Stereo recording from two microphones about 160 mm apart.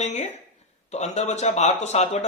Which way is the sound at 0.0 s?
40° left (ahead or behind).